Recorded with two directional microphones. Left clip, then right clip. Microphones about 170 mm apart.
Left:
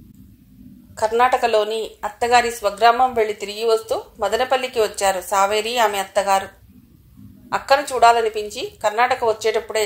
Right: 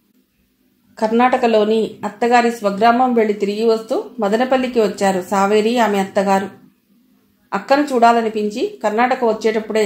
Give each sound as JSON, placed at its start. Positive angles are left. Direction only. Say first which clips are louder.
{"t": 0.9, "sound": "speech", "louder": "right 2 dB", "side_deg": 35}